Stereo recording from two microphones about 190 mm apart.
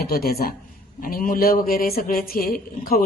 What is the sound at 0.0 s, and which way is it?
Speech, 55° left (ahead or behind).